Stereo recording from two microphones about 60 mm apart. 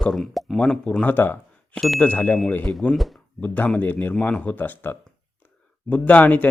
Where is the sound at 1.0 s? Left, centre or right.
Left.